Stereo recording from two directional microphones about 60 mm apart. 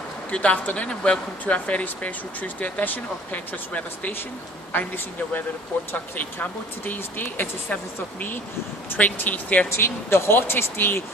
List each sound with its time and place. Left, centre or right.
0.3 s speech: left
9.7 s speech: left